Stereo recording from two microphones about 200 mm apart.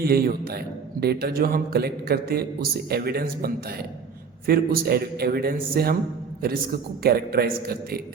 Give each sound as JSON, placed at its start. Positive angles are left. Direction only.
{"t": 0.0, "sound": "a man's voice", "side_deg": -50}
{"t": 7.0, "sound": "a man's voice", "side_deg": -50}